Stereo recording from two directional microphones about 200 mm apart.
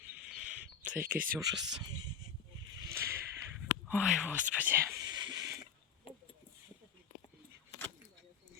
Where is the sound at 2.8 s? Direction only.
15° right (ahead or behind).